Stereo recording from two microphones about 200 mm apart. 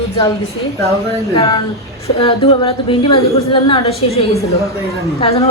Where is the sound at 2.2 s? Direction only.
25° left (ahead or behind).